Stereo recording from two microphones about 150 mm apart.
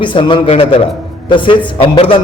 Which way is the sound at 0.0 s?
35° left (ahead or behind).